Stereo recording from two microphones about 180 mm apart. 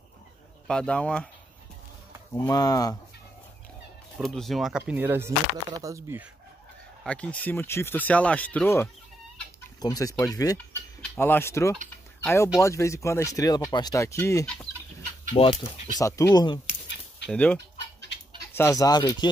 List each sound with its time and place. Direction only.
0.7 s speech: 5° left (ahead or behind)
2.3 s speech: 20° left (ahead or behind)
4.2 s speech: centre (ahead or behind); by 6.2 s 15° right (ahead or behind)
7.0 s speech: 5° left (ahead or behind)
15.3 s speech: 35° left (ahead or behind)
16.0 s speech: 20° left (ahead or behind)
17.3 s speech: 10° left (ahead or behind)